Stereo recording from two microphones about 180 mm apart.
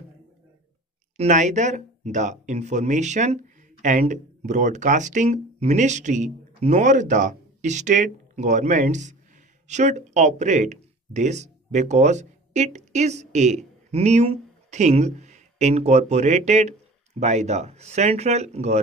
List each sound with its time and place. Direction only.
1.1 s speech: 40° right (ahead or behind)